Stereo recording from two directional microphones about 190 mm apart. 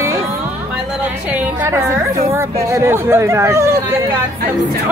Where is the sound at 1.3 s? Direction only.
10° right (ahead or behind).